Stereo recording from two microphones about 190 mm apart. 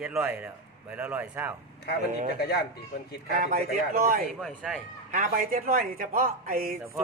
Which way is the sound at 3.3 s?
50° right (ahead or behind).